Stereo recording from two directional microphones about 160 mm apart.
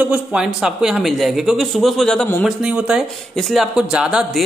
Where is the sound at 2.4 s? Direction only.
5° right (ahead or behind).